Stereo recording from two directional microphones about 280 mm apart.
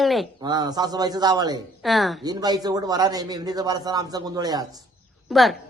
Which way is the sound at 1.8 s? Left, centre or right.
Centre.